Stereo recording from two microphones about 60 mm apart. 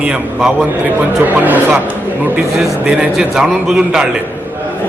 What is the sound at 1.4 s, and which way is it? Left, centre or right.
Speech, right.